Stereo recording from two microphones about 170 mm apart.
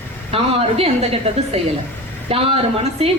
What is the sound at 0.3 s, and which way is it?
Speech, 35° right (ahead or behind).